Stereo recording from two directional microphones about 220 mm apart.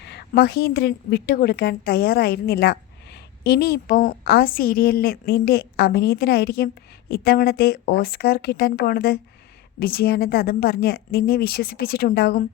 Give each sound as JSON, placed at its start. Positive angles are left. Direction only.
{"t": 0.0, "sound": "a woman's voice", "side_deg": 50}